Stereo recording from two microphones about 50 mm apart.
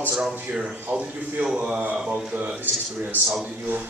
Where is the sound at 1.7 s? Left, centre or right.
Right.